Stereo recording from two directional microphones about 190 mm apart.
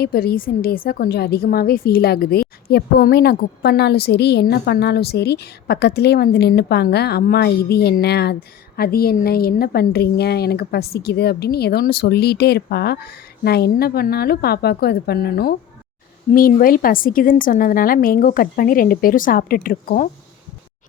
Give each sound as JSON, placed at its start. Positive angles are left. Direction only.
{"t": 0.0, "sound": "a woman's voice", "side_deg": 55}